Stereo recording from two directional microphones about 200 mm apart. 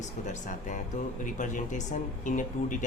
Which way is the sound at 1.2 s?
40° left (ahead or behind).